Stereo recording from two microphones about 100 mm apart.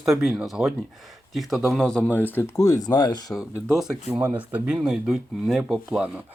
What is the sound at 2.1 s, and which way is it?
Speech, 20° left (ahead or behind).